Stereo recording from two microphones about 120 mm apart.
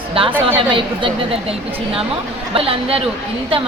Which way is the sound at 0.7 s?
45° right (ahead or behind).